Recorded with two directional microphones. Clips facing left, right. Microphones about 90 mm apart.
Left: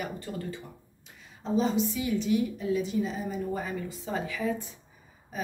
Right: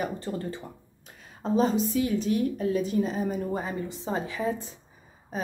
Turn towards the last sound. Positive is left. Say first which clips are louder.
# right 3 dB
turn(degrees=-35)  # may be behind; listen again after turning